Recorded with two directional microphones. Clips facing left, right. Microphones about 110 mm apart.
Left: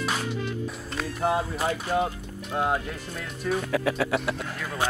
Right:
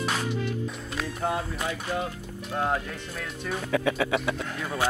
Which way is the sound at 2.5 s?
15° left (ahead or behind).